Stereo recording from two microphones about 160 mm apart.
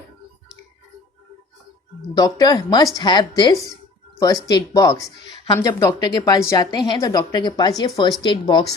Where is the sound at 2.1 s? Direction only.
25° left (ahead or behind).